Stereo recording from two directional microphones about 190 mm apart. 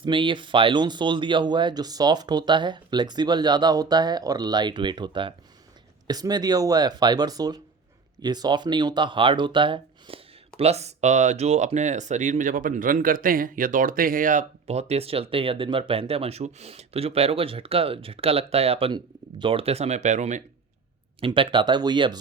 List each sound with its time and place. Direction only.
0.0 s speech: 25° right (ahead or behind)
21.2 s speech: 25° right (ahead or behind)